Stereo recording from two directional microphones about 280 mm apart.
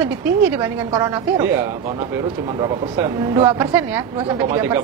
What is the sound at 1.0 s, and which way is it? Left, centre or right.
Speech, centre.